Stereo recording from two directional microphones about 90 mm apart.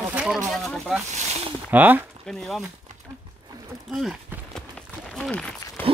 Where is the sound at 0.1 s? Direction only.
10° right (ahead or behind).